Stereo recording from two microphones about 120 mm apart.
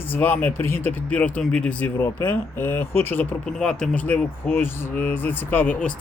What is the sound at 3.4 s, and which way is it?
Speech, 5° left (ahead or behind).